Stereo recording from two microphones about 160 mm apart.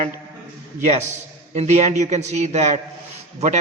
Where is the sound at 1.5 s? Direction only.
45° right (ahead or behind).